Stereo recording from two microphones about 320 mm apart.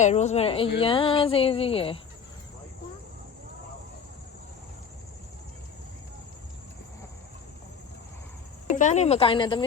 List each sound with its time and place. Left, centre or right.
0.0 s speech: left
0.8 s a sound: centre
8.6 s speech: left